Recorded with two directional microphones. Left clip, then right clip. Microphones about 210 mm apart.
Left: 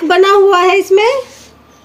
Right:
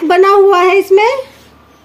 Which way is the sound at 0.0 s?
10° right (ahead or behind).